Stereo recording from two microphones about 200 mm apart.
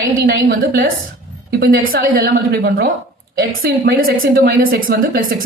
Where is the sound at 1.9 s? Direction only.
45° right (ahead or behind).